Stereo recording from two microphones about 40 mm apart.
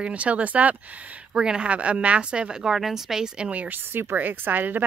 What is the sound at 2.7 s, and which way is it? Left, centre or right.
Speech, centre.